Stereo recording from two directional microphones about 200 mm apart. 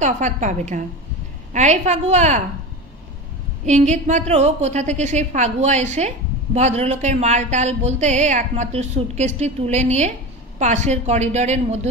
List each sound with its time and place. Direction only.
0.0 s a woman's voice: 35° right (ahead or behind)
3.6 s a woman's voice: 35° right (ahead or behind)